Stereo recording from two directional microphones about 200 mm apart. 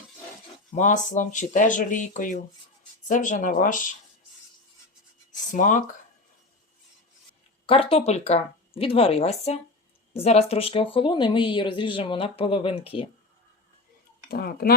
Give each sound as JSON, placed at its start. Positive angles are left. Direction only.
{"t": 0.7, "sound": "speech", "side_deg": 40}
{"t": 5.5, "sound": "speech", "side_deg": 40}
{"t": 7.7, "sound": "speech", "side_deg": 30}
{"t": 14.3, "sound": "speech", "side_deg": 50}